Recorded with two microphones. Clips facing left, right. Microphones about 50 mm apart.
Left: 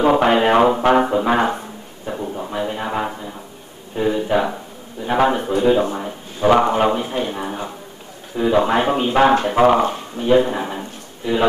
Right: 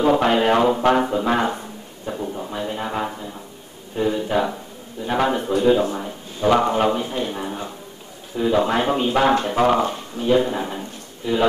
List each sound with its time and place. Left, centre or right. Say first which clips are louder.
0.0 s speech: left 2 dB; left
2.0 s a sound: left 2 dB; centre
5.0 s speech: left 3 dB; centre